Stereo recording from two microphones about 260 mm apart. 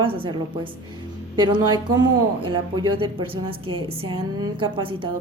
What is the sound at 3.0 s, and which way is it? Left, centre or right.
A woman's voice, centre.